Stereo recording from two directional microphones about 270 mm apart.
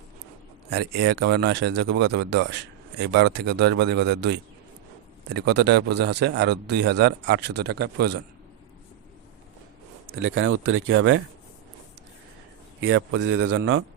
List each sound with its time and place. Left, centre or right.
0.7 s speech: right
10.1 s speech: right
12.8 s speech: right